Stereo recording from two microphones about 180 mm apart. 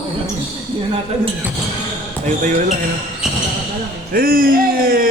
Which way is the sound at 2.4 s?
45° right (ahead or behind).